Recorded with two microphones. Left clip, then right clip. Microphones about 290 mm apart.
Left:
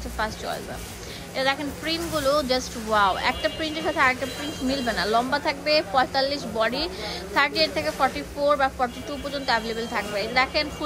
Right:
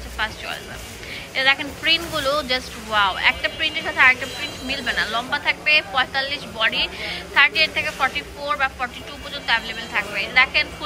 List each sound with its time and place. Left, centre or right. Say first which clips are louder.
0.2 s a woman's voice: right 2 dB; centre